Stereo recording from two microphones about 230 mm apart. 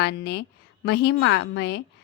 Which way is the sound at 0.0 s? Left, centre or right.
Left.